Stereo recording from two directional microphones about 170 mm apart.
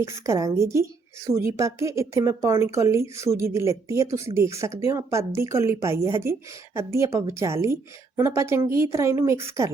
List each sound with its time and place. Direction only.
0.0 s a woman's voice: 20° right (ahead or behind)